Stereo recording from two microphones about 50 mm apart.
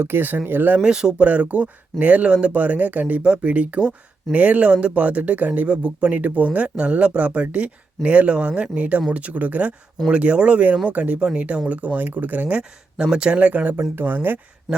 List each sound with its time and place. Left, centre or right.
0.0 s speech: right
0.8 s speech: centre
1.2 s speech: right
12.5 s speech: centre; by 13.7 s right
13.9 s speech: right
14.7 s speech: centre